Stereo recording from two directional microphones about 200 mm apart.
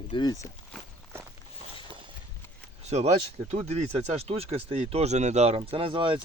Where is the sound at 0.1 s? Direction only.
20° left (ahead or behind).